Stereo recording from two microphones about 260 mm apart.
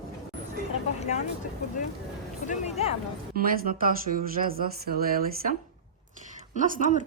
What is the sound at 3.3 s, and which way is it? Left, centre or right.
Speech, right.